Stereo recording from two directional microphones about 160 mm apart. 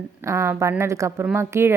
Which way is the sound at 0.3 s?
20° right (ahead or behind).